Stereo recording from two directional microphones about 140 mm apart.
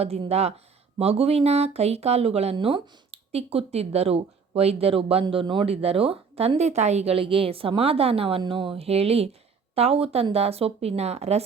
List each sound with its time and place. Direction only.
0.0 s speech: 45° right (ahead or behind)